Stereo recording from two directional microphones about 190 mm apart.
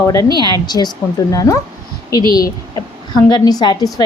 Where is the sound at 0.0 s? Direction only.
15° left (ahead or behind).